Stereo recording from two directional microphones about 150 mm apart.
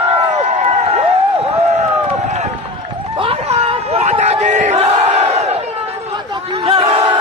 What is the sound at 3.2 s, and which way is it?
Battle cry, 40° right (ahead or behind).